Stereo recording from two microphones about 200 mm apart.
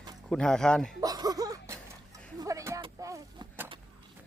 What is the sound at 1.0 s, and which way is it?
Music, 20° right (ahead or behind).